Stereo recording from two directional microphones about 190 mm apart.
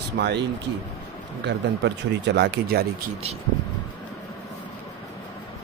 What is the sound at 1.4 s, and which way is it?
A man's voice, 65° right (ahead or behind).